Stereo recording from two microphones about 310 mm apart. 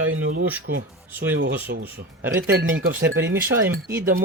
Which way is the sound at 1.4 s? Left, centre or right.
Right.